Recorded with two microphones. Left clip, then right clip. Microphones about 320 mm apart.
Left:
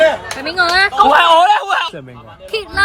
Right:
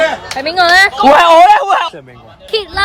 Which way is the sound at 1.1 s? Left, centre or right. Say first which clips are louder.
Right 7 dB; right.